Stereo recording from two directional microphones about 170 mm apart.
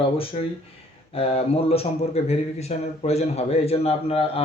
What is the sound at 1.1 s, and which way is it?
A man's voice, 35° left (ahead or behind).